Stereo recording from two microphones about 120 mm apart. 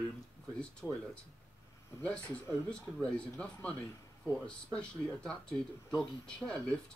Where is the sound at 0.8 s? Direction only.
15° left (ahead or behind).